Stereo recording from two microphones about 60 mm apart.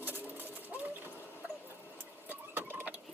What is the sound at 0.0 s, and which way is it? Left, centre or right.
Bird, right.